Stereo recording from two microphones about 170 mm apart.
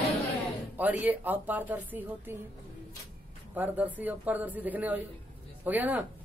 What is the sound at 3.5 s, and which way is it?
Speech, 10° right (ahead or behind).